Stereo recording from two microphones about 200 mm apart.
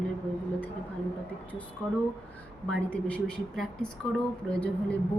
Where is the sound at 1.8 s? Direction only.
5° left (ahead or behind).